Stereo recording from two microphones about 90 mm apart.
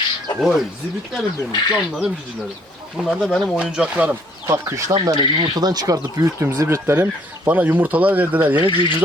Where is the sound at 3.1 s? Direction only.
5° right (ahead or behind).